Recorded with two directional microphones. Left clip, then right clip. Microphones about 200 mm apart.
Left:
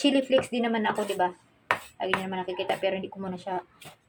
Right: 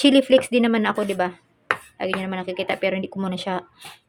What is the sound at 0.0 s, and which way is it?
A woman's voice, 40° right (ahead or behind).